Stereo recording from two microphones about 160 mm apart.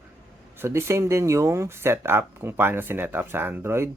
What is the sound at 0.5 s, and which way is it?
Speech, 15° right (ahead or behind).